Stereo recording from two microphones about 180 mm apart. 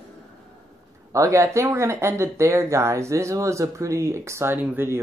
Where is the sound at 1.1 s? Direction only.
15° right (ahead or behind).